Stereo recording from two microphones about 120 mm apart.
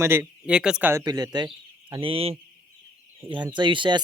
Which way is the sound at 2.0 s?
50° right (ahead or behind).